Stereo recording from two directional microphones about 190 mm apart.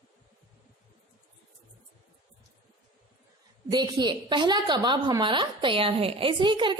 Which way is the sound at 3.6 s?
20° right (ahead or behind).